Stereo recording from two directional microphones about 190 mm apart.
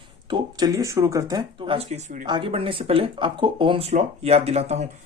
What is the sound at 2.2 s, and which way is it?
Speech, 25° right (ahead or behind).